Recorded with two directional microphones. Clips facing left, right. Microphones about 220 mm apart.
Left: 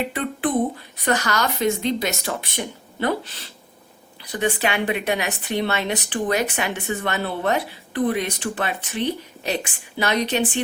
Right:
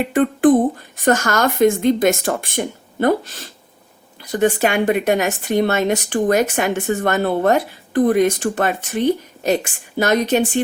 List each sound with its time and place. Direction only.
0.0 s a woman's voice: 45° right (ahead or behind)